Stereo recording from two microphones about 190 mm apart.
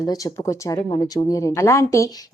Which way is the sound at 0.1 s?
20° left (ahead or behind).